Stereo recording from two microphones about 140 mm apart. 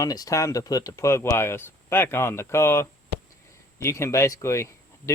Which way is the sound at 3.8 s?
20° left (ahead or behind).